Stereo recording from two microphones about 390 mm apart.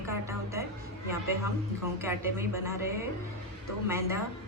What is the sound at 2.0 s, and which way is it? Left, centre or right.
Speech, centre.